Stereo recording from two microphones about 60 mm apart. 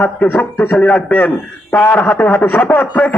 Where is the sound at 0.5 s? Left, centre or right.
Left.